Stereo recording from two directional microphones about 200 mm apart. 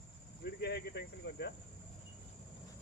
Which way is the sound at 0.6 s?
55° left (ahead or behind).